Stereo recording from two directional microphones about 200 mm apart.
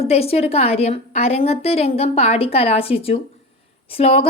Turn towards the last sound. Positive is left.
turn(degrees=30)  # may be behind; listen again after turning